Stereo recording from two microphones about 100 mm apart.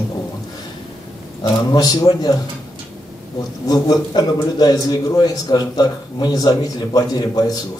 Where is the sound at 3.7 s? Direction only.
40° left (ahead or behind).